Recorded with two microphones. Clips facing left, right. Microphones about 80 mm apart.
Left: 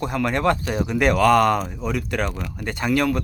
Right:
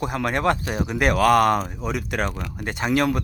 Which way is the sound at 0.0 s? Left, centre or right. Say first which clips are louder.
Left 1 dB; centre.